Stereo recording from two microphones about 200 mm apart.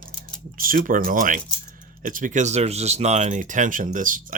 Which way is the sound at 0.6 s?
45° right (ahead or behind).